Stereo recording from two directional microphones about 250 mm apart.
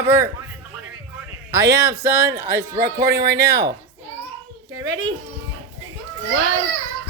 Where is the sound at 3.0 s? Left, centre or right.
Right.